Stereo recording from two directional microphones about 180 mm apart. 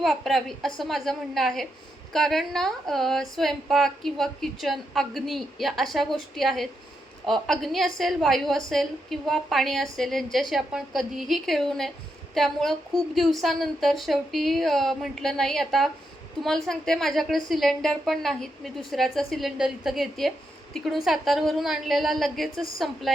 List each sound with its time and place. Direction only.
0.0 s a woman's voice: centre (ahead or behind)